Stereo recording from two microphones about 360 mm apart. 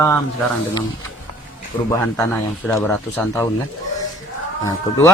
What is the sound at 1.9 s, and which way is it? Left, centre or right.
Speech, centre.